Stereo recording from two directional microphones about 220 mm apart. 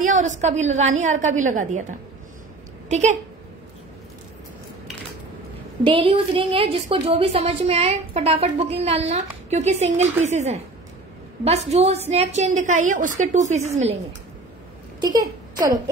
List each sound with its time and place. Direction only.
0.0 s a woman's voice: 35° right (ahead or behind)
5.9 s a woman's voice: 25° right (ahead or behind)
15.0 s speech: 15° right (ahead or behind)